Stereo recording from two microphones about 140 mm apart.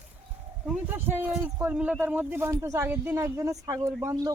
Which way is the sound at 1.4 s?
15° right (ahead or behind).